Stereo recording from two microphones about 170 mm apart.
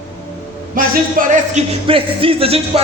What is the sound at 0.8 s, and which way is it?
Music, 50° right (ahead or behind).